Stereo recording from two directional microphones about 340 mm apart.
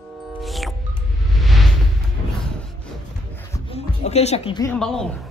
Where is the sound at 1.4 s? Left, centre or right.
Centre.